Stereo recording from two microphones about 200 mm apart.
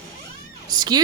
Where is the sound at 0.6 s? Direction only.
20° right (ahead or behind).